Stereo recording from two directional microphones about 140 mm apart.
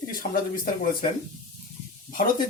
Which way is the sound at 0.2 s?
75° left (ahead or behind).